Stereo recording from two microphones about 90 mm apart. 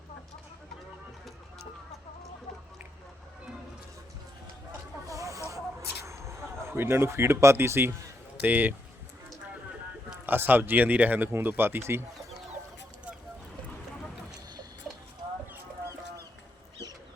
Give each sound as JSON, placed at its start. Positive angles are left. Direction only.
{"t": 5.0, "sound": "snake", "side_deg": -35}
{"t": 6.1, "sound": "speech", "side_deg": -35}
{"t": 10.2, "sound": "speech", "side_deg": -20}